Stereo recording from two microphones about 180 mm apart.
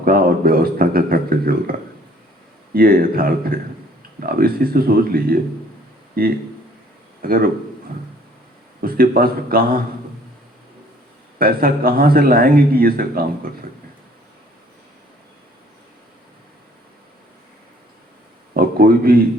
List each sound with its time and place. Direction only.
0.0 s speech: 55° right (ahead or behind)
2.7 s speech: 55° right (ahead or behind)
8.8 s speech: 55° right (ahead or behind)
11.3 s speech: 55° right (ahead or behind)
18.5 s a sound: 55° right (ahead or behind)